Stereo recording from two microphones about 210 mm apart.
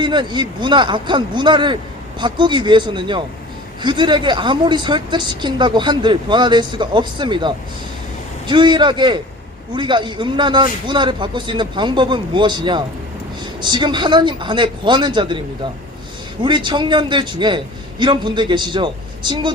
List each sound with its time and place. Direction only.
0.0 s a woman's voice: 20° right (ahead or behind)